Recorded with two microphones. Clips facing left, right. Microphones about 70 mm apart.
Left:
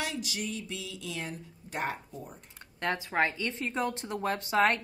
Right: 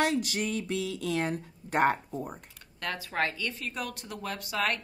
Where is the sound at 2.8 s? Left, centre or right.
Left.